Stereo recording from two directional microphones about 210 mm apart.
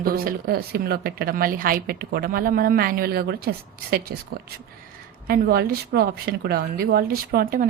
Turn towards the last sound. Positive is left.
turn(degrees=-45)  # may be behind; listen again after turning